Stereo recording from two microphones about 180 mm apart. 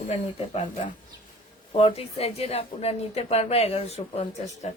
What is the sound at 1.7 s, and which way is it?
A woman's voice, 30° left (ahead or behind).